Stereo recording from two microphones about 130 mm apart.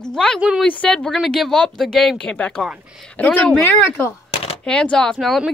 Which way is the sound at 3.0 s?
10° left (ahead or behind).